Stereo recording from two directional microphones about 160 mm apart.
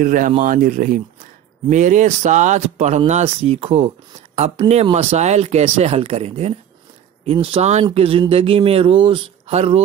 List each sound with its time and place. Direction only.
0.0 s speech: 55° right (ahead or behind); by 9.8 s 40° right (ahead or behind)